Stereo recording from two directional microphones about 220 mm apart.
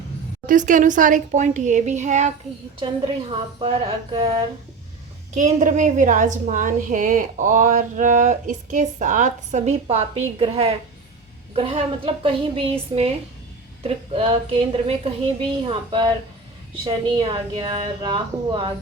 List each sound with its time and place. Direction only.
0.4 s a woman's voice: 35° right (ahead or behind)
5.3 s a woman's voice: 35° right (ahead or behind)